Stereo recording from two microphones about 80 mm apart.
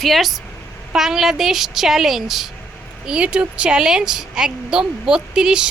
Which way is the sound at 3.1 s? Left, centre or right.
Centre.